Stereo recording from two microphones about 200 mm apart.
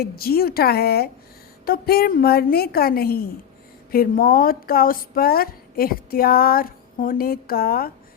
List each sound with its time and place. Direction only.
0.0 s speech: 50° left (ahead or behind)